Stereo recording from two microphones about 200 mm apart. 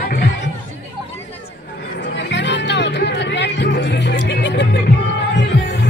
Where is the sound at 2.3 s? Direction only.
60° left (ahead or behind).